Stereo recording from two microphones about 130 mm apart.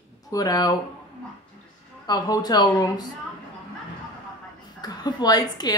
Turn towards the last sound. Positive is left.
turn(degrees=30)  # may be behind; listen again after turning